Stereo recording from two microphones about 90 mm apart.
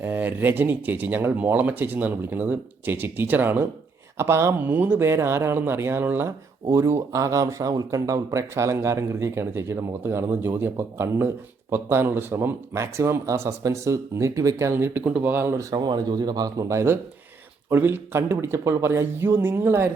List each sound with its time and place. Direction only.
0.0 s speech: 20° right (ahead or behind)
15.0 s speech: 10° right (ahead or behind)
15.3 s speech: 25° right (ahead or behind)
15.7 s speech: 50° right (ahead or behind); by 19.9 s 25° right (ahead or behind)